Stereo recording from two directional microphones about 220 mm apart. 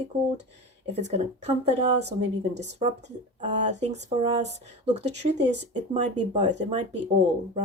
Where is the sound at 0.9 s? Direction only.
30° right (ahead or behind).